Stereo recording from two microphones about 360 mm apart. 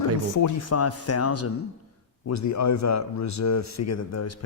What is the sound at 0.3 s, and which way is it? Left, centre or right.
A man's voice, left.